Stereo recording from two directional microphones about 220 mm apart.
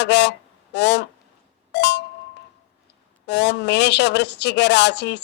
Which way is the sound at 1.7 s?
50° left (ahead or behind).